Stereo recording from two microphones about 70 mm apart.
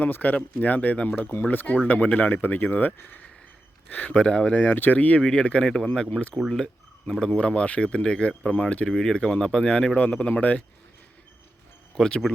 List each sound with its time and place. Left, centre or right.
0.0 s speech: left; by 6.7 s centre
7.3 s speech: centre
11.9 s speech: centre